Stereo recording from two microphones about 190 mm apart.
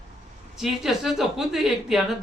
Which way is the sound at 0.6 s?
Centre (ahead or behind).